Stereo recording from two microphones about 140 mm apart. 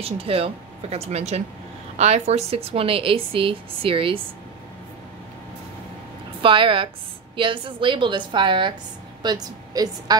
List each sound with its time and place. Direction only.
0.0 s a woman's voice: 45° right (ahead or behind)
6.4 s a woman's voice: 35° right (ahead or behind)